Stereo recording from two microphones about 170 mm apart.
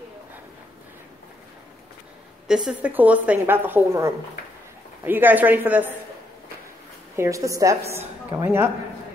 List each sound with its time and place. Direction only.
2.4 s a woman's voice: 5° right (ahead or behind)
7.2 s a woman's voice: 20° right (ahead or behind)